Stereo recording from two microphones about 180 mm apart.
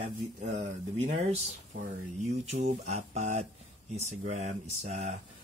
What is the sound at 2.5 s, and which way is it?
Speech, 40° right (ahead or behind).